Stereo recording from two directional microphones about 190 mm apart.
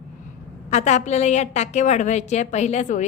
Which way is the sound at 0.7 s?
35° left (ahead or behind).